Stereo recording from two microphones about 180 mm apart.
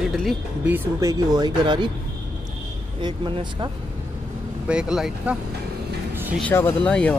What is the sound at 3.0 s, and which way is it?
Speech, 25° right (ahead or behind).